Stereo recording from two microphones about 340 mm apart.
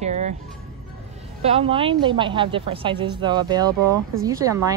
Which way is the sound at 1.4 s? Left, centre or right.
Centre.